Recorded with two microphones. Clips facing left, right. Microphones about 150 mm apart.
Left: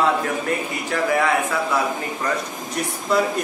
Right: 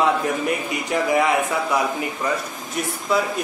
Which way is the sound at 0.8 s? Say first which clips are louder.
Right 1 dB; 15° right (ahead or behind).